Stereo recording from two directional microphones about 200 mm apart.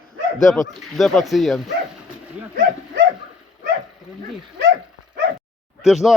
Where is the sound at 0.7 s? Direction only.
Centre (ahead or behind).